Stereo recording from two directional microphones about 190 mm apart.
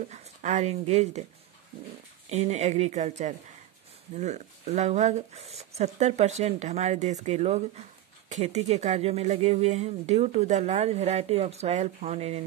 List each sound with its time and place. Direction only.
0.1 s speech: 40° right (ahead or behind)
2.2 s speech: 35° right (ahead or behind)